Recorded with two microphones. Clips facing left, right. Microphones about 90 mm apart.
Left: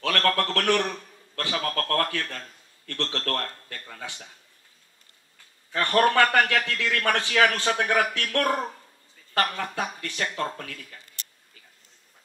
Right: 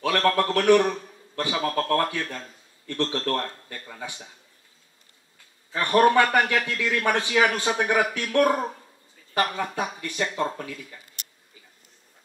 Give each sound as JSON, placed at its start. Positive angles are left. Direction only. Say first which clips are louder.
{"t": 0.0, "sound": "a man's voice", "louder": "right 3 dB", "side_deg": -15}
{"t": 5.7, "sound": "a man's voice", "louder": "right 3 dB", "side_deg": -15}